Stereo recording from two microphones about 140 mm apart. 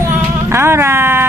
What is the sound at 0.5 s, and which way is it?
Speech, 15° right (ahead or behind).